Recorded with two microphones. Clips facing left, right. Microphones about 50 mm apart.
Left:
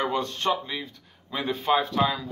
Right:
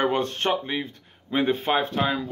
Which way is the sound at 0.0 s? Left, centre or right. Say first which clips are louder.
Right 3 dB; right.